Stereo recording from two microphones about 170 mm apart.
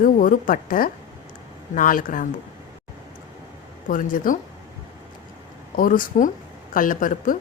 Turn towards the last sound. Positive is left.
turn(degrees=50)  # may be behind; listen again after turning